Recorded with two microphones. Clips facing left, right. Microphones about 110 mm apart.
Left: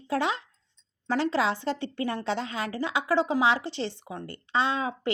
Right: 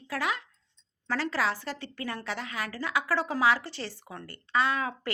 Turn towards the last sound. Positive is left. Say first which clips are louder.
# left 2 dB
turn(degrees=20)  # may be behind; listen again after turning